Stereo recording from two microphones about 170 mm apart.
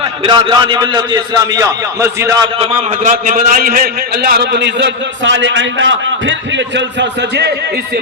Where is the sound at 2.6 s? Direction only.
45° right (ahead or behind); by 7.5 s 85° right.